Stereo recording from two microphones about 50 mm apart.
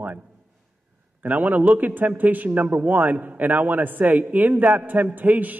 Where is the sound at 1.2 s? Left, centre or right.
Right.